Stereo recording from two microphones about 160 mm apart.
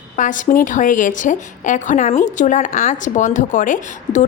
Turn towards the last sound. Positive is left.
turn(degrees=55)  # may be behind; listen again after turning